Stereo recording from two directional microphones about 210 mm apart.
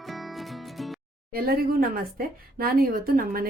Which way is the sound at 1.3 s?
45° right (ahead or behind).